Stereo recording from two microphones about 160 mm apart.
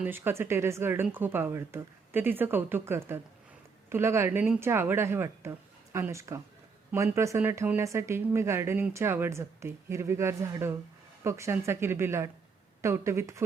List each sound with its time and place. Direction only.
0.0 s speech: 15° right (ahead or behind)